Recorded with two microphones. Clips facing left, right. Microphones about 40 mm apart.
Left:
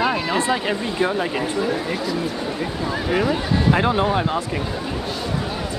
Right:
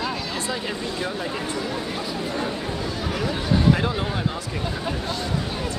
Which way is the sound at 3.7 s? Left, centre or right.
Left.